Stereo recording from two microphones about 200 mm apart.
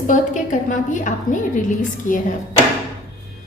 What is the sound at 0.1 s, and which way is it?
A woman's voice, 40° left (ahead or behind).